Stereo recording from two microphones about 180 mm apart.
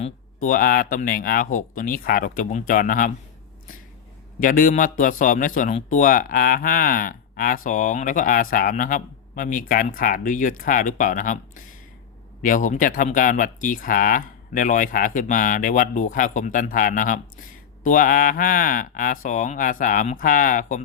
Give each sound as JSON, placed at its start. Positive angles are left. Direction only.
{"t": 0.3, "sound": "speech", "side_deg": 50}
{"t": 4.4, "sound": "speech", "side_deg": 50}